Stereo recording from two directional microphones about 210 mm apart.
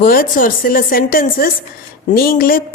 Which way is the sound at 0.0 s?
40° left (ahead or behind).